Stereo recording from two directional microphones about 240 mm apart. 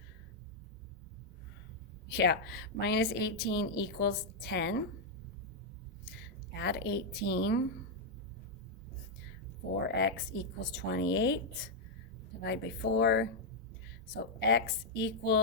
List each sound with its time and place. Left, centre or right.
2.0 s a woman's voice: left
6.5 s a woman's voice: left
9.9 s a woman's voice: left
14.3 s a woman's voice: left